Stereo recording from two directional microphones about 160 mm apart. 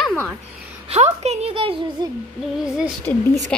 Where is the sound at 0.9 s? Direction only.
45° right (ahead or behind).